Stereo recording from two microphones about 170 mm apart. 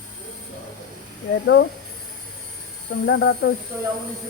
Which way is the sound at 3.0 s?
90° left.